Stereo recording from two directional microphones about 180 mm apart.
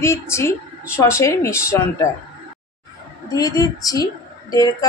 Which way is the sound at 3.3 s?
20° left (ahead or behind).